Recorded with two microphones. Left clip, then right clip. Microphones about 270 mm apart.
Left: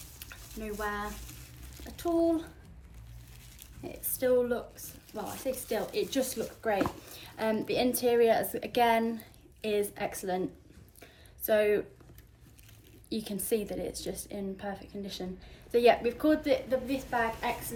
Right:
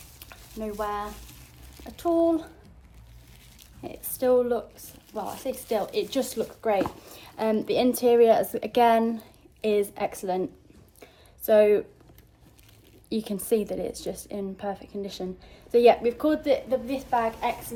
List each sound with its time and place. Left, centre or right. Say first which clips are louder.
0.2 s stir: right 7 dB; centre
1.3 s frying: right 1 dB; centre
2.2 s a woman's voice: right 5 dB; centre
4.1 s a woman's voice: right 5 dB; centre
11.0 s a sound: right 7 dB; centre
13.1 s a woman's voice: right 6 dB; right